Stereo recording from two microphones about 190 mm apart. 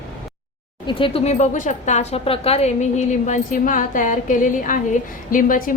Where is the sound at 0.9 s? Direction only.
25° left (ahead or behind).